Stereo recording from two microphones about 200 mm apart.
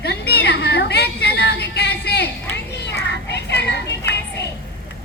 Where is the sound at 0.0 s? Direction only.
55° left (ahead or behind).